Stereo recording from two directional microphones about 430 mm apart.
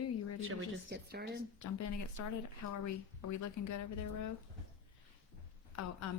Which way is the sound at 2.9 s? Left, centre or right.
Left.